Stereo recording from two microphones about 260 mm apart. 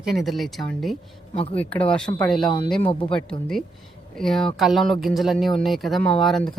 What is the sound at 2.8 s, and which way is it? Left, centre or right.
Speech, centre.